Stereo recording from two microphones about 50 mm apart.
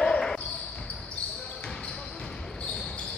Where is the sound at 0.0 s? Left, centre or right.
Centre.